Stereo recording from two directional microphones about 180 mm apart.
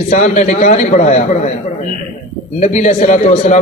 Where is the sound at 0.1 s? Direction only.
40° left (ahead or behind).